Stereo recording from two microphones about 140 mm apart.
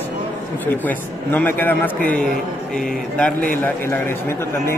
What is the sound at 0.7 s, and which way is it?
A man's voice, 15° left (ahead or behind).